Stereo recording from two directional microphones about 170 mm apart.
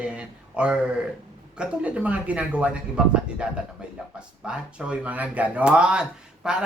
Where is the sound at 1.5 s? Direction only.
10° right (ahead or behind).